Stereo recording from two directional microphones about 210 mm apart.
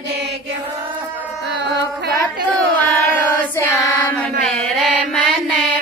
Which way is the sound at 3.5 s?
15° left (ahead or behind).